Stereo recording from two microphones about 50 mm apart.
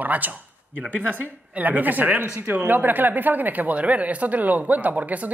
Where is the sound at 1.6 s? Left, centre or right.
Right.